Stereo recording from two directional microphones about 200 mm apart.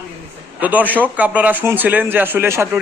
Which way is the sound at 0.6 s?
10° right (ahead or behind).